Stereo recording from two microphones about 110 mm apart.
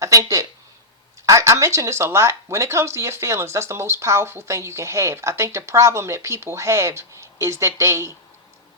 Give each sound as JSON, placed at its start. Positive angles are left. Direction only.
{"t": 0.0, "sound": "speech", "side_deg": -30}